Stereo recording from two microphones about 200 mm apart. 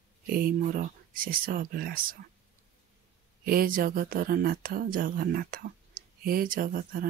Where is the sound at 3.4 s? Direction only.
45° right (ahead or behind).